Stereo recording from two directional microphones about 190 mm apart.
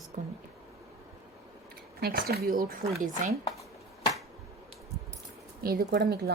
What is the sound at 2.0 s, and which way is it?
Speech, 50° right (ahead or behind).